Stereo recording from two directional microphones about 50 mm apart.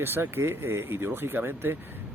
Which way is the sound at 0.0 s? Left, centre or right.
Right.